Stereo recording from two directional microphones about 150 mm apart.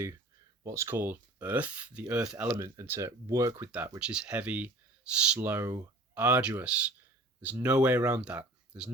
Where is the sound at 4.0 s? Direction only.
5° right (ahead or behind).